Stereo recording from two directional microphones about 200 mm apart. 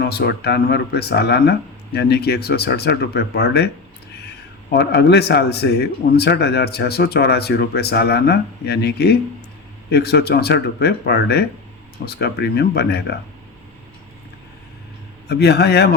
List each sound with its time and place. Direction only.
0.0 s a man's voice: 55° left (ahead or behind)
4.7 s a man's voice: 55° left (ahead or behind)
15.3 s a man's voice: 55° left (ahead or behind)